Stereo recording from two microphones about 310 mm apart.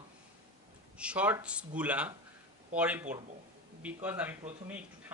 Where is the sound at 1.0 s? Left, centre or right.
Centre.